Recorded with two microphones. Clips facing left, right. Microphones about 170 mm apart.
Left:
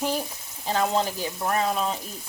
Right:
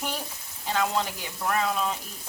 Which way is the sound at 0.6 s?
35° left (ahead or behind).